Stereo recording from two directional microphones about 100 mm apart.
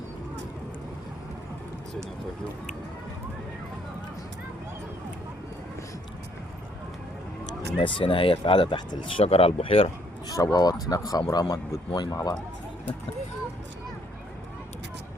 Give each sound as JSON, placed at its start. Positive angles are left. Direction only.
{"t": 7.8, "sound": "speech", "side_deg": 60}
{"t": 9.2, "sound": "speech", "side_deg": 75}
{"t": 10.2, "sound": "speech", "side_deg": 40}